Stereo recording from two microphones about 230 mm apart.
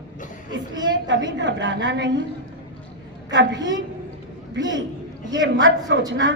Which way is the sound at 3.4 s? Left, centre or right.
Right.